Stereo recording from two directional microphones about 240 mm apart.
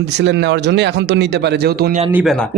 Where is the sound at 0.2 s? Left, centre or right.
Right.